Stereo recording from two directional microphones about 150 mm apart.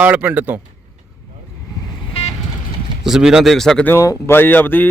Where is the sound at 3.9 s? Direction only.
15° left (ahead or behind).